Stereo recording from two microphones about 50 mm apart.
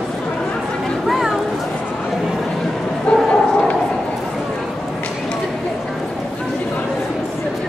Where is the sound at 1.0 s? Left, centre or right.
Centre.